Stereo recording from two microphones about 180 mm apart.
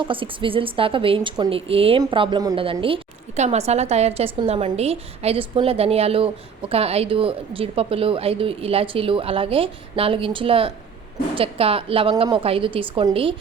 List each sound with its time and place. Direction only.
0.0 s a woman's voice: 30° right (ahead or behind)